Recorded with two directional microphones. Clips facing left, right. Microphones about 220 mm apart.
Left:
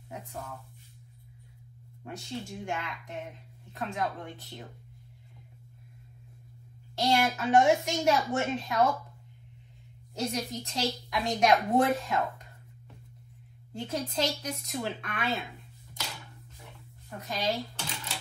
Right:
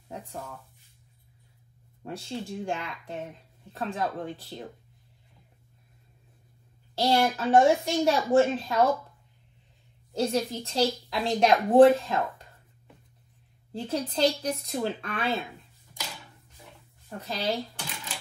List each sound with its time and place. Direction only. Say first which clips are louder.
2.0 s a woman's voice: right 3 dB; 30° right (ahead or behind)
7.0 s a woman's voice: right 3 dB; 30° right (ahead or behind)
10.1 s a woman's voice: right 6 dB; 30° right (ahead or behind)
13.7 s a woman's voice: right 4 dB; 30° right (ahead or behind)
17.2 s speech: right 1 dB; 30° right (ahead or behind)